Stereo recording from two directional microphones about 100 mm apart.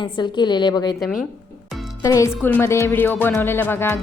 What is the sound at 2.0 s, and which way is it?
Speech, 35° left (ahead or behind).